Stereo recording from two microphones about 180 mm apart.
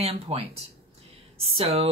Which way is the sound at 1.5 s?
30° right (ahead or behind).